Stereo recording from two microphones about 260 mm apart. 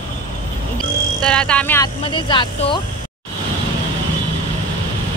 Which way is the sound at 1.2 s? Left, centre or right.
Centre.